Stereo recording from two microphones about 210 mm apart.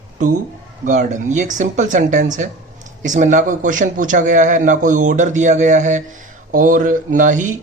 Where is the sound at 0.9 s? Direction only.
35° right (ahead or behind).